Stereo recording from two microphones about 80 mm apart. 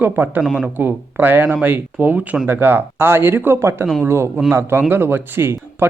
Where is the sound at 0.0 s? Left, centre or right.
Right.